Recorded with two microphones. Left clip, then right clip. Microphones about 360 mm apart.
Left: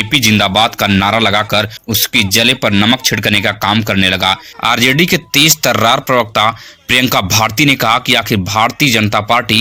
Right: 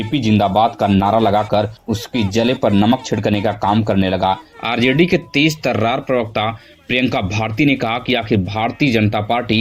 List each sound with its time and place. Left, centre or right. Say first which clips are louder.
0.0 s speech: left 6 dB; left
4.8 s speech: left 2 dB; left
5.0 s speech: left 5 dB; left